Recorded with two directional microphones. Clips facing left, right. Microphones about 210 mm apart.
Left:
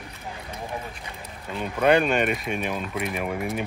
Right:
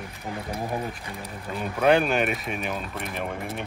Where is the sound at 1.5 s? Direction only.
Centre (ahead or behind).